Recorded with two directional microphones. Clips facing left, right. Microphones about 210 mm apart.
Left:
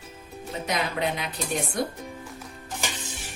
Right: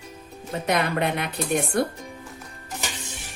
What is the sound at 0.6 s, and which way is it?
Speech, 60° right (ahead or behind).